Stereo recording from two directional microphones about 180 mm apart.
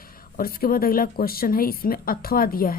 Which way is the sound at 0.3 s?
55° left (ahead or behind).